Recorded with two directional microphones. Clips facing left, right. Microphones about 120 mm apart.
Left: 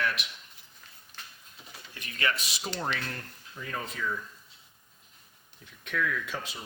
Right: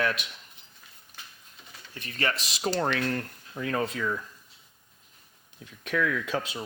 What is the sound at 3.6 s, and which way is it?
Speech, 80° right.